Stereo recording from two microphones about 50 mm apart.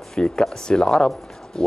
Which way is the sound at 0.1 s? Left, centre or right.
Centre.